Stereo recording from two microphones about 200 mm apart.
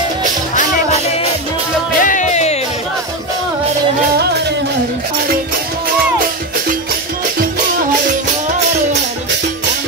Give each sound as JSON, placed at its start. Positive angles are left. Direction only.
{"t": 2.0, "sound": "music", "side_deg": 40}